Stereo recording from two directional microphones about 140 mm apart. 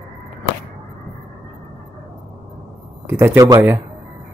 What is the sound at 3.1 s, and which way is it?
Speech, 15° right (ahead or behind).